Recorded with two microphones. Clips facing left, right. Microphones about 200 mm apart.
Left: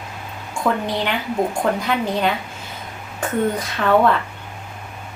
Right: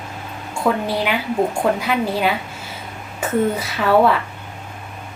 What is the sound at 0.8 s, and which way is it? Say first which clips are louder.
A woman's voice: right 2 dB; 5° right (ahead or behind).